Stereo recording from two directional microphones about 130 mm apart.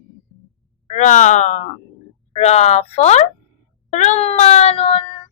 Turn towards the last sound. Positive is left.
turn(degrees=45)  # may be behind; listen again after turning